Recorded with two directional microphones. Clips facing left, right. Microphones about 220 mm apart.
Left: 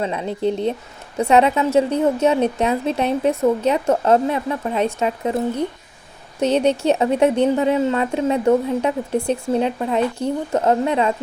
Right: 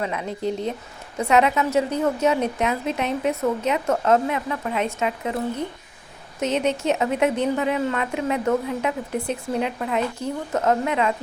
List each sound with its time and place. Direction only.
0.0 s a woman's voice: 30° left (ahead or behind)
6.4 s a woman's voice: 35° left (ahead or behind)